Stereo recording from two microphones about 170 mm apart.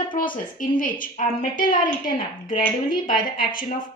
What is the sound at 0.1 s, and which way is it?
Speech, 55° left (ahead or behind).